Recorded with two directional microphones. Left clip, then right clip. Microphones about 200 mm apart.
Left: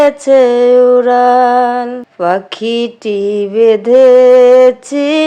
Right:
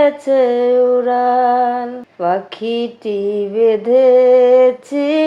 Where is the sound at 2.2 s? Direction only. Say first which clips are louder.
Left 4 dB; 25° left (ahead or behind).